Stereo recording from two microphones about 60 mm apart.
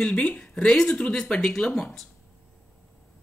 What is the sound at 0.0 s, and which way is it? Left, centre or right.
Speech, left.